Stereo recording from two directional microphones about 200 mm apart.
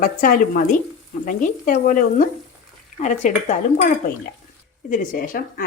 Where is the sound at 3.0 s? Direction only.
35° left (ahead or behind).